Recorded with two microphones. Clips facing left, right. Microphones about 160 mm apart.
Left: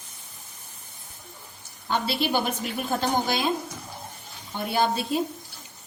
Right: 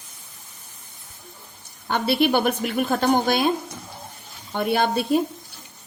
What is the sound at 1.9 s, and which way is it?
A woman's voice, 60° right (ahead or behind).